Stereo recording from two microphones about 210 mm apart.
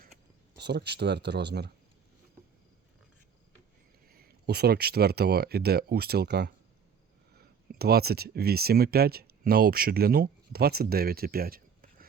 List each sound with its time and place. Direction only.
0.5 s speech: 55° right (ahead or behind)
4.1 s speech: 50° right (ahead or behind)
7.7 s speech: 50° right (ahead or behind)